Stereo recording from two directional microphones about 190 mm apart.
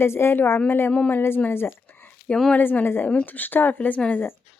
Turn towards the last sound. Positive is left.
turn(degrees=10)  # may be behind; listen again after turning